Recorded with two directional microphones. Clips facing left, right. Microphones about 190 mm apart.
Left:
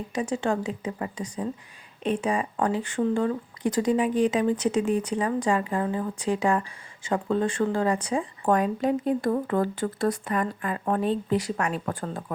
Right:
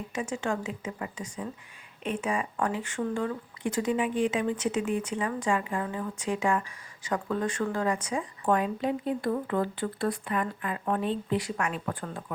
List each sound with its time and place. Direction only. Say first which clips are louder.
0.1 s speech: left 5 dB; 35° left (ahead or behind)